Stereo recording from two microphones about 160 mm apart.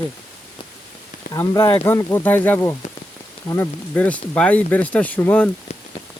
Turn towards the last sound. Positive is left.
turn(degrees=10)  # may be behind; listen again after turning